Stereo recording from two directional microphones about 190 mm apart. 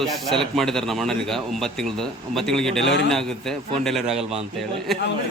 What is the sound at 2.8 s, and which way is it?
Speech, 70° left (ahead or behind).